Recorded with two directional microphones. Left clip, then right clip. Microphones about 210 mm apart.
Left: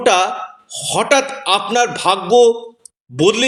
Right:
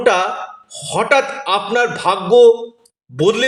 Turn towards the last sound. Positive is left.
turn(degrees=30)  # may be behind; listen again after turning